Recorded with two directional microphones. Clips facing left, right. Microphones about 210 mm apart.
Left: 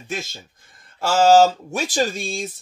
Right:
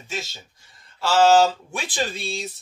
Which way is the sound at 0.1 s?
50° left (ahead or behind).